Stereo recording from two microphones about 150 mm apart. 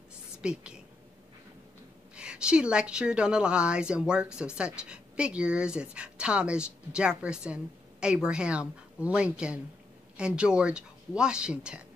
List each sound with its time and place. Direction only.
0.4 s a woman's voice: 5° right (ahead or behind)
2.1 s speech: 5° right (ahead or behind)